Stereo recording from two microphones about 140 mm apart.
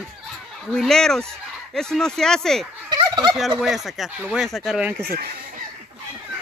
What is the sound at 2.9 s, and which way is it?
Gobble, 30° right (ahead or behind).